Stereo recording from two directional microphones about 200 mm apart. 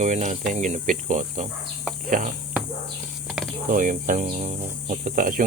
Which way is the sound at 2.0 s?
40° right (ahead or behind).